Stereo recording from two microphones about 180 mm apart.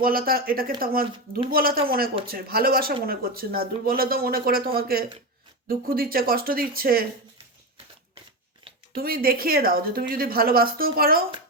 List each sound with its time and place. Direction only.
0.0 s speech: 55° right (ahead or behind)
9.0 s speech: 55° right (ahead or behind)